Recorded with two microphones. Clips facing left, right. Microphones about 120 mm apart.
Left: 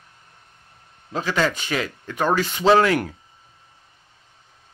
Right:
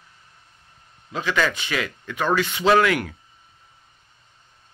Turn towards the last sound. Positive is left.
turn(degrees=35)  # may be behind; listen again after turning